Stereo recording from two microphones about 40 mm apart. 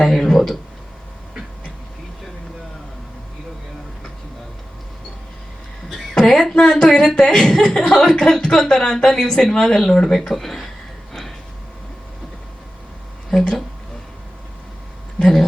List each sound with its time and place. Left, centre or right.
0.0 s speech: centre
6.1 s speech: centre
7.7 s speech: left; by 10.7 s centre
11.1 s train: centre
13.3 s speech: centre
15.2 s speech: centre